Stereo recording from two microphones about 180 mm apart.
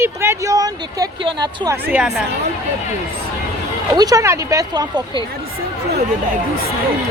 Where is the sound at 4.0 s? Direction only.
20° right (ahead or behind).